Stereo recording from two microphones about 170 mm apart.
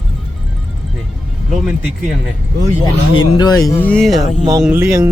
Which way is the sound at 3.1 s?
25° left (ahead or behind).